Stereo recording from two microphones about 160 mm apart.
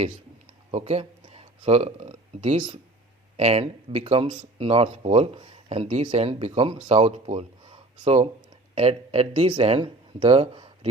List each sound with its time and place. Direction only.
0.7 s speech: 40° right (ahead or behind)